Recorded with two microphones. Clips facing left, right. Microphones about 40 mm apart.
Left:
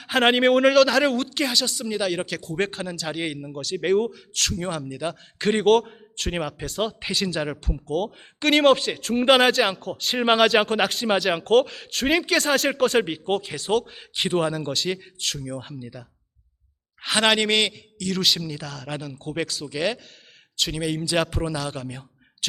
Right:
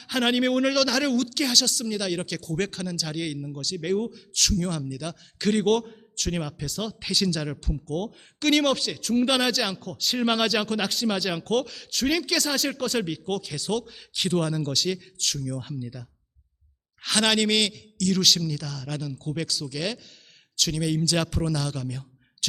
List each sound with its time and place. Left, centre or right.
0.0 s a man's voice: left
0.4 s a man's voice: centre
2.6 s a man's voice: left
4.1 s a man's voice: centre
8.7 s a man's voice: left
12.0 s a man's voice: left; by 18.9 s centre
18.9 s a man's voice: left